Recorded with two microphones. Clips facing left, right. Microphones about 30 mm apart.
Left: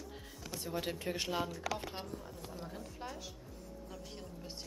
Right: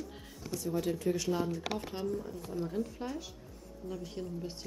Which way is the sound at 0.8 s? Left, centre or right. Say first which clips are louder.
Right 6 dB; left.